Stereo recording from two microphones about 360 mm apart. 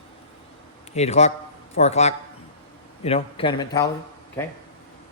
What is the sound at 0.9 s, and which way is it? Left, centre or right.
Speech, centre.